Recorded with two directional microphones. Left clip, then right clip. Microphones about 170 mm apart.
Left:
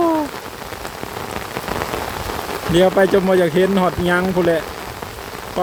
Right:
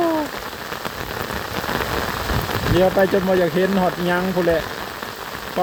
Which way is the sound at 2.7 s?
20° left (ahead or behind).